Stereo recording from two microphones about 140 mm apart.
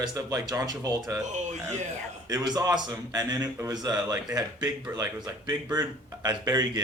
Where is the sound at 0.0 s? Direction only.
25° right (ahead or behind).